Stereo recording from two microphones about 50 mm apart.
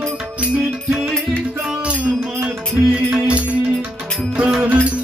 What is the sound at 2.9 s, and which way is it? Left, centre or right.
Music, centre.